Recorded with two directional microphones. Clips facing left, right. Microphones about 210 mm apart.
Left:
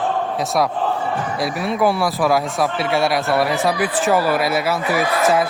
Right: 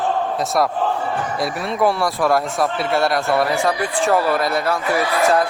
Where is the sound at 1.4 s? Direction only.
Centre (ahead or behind).